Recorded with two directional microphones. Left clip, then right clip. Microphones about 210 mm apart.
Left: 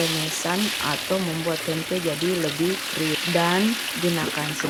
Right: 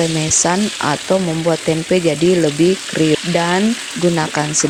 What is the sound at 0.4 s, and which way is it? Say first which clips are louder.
Speech: right 7 dB; 35° right (ahead or behind).